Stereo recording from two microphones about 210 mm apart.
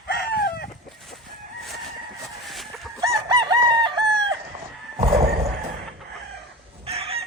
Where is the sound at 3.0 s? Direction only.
20° right (ahead or behind).